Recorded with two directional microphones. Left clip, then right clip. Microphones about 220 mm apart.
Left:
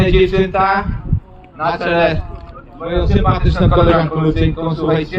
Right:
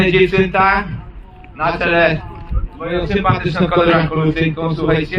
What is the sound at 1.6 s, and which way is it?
A man's voice, 50° right (ahead or behind).